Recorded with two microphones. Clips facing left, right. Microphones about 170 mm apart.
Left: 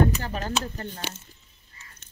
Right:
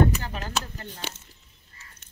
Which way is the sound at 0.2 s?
40° left (ahead or behind).